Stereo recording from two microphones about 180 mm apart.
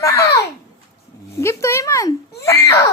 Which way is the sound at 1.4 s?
15° left (ahead or behind).